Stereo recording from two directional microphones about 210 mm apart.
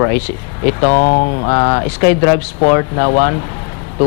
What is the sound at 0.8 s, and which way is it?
Speech, 25° left (ahead or behind).